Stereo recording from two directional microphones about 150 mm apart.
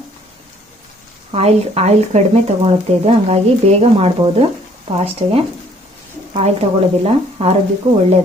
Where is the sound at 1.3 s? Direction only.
45° right (ahead or behind).